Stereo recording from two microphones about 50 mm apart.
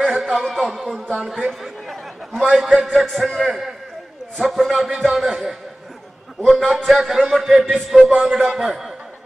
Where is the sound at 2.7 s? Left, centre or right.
Centre.